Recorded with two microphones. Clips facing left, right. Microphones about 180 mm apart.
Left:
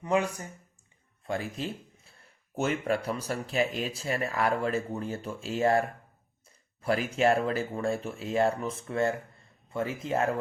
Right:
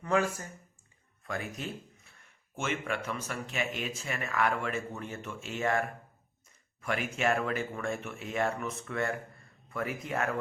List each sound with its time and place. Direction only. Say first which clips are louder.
0.0 s speech: left 1 dB; 20° left (ahead or behind)
1.2 s speech: left 4 dB; 30° left (ahead or behind)
6.8 s speech: left 5 dB; 35° left (ahead or behind)